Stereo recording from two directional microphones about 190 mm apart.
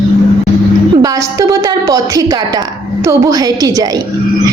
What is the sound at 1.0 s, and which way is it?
A woman's voice, 20° right (ahead or behind).